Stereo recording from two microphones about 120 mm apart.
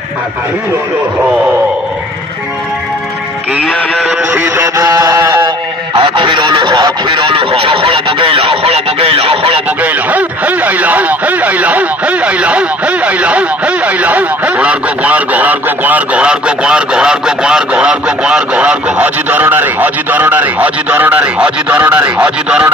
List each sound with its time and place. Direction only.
4.3 s speech: 25° right (ahead or behind)
5.9 s speech: 40° right (ahead or behind)
9.8 s speech: 10° right (ahead or behind)